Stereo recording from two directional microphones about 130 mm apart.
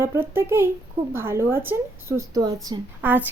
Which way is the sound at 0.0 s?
15° right (ahead or behind).